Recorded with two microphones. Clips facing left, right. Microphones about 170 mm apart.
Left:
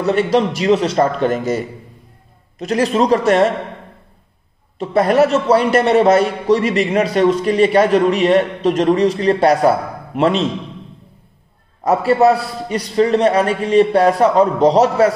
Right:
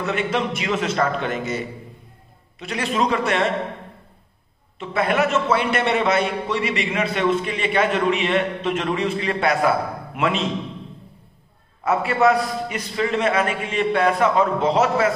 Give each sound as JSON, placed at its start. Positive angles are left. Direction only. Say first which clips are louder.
{"t": 0.0, "sound": "a man's voice", "louder": "left 8 dB", "side_deg": 35}
{"t": 2.6, "sound": "a man's voice", "louder": "left 7 dB", "side_deg": 40}
{"t": 4.7, "sound": "a man's voice", "louder": "left 8 dB", "side_deg": 40}
{"t": 11.8, "sound": "a man's voice", "louder": "left 6 dB", "side_deg": 35}